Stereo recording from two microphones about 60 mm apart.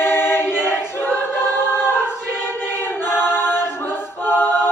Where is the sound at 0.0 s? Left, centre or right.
Left.